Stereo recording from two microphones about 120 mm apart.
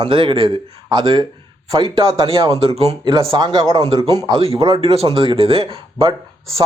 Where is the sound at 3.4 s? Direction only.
35° right (ahead or behind).